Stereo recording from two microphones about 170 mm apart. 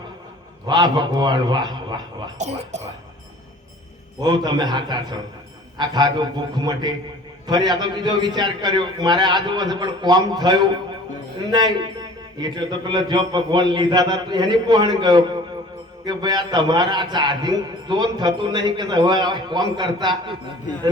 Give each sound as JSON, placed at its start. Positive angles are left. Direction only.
{"t": 0.7, "sound": "a man's voice", "side_deg": -25}
{"t": 2.4, "sound": "speech", "side_deg": -40}
{"t": 4.2, "sound": "a man's voice", "side_deg": -25}